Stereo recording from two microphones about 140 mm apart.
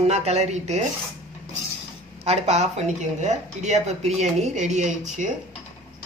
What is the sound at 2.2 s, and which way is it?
Speech, 50° right (ahead or behind).